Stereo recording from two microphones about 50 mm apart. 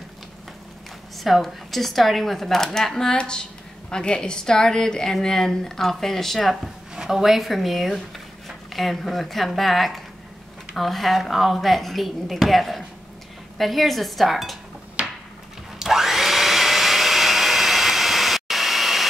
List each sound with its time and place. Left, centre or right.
1.1 s a woman's voice: centre
7.0 s speech: centre
15.0 s a sound: right
15.8 s vacuum cleaner: centre